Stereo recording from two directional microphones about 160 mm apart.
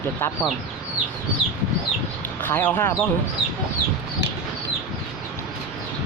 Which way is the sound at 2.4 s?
10° left (ahead or behind).